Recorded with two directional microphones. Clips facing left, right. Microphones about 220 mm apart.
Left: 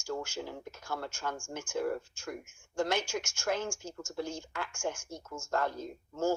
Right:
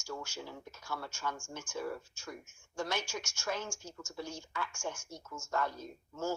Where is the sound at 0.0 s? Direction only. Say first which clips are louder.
Left 6 dB; 50° left (ahead or behind).